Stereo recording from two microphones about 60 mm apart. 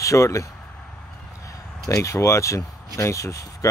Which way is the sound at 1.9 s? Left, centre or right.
Left.